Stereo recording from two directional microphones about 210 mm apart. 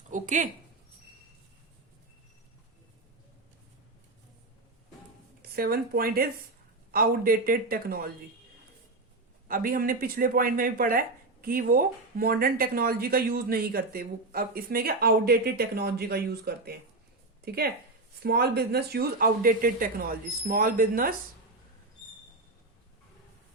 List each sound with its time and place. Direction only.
0.1 s a sound: 35° right (ahead or behind)
5.4 s speech: 45° right (ahead or behind)
9.5 s a woman's voice: 45° right (ahead or behind)